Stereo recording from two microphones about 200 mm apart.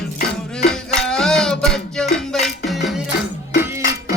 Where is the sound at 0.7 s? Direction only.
5° left (ahead or behind).